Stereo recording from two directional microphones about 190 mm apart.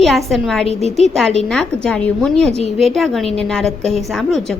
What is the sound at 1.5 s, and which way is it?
A woman's voice, 5° left (ahead or behind).